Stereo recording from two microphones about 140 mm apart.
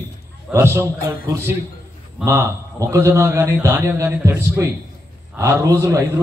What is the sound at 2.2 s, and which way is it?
A man's voice, 20° right (ahead or behind).